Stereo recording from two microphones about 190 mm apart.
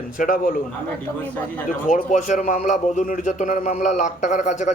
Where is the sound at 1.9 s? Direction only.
40° left (ahead or behind).